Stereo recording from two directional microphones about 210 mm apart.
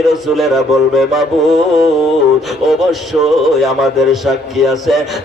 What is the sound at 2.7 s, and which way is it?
A man's voice, centre (ahead or behind).